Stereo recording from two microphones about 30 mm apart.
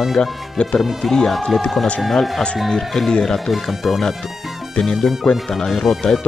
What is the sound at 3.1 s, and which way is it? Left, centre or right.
Speech, centre.